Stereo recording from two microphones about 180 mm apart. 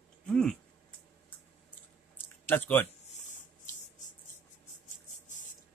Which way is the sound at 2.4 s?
10° left (ahead or behind).